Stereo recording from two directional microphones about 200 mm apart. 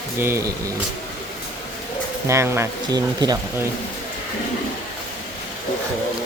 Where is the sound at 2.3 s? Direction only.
15° right (ahead or behind).